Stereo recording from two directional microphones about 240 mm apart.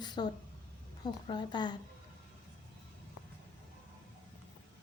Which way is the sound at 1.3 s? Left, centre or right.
Centre.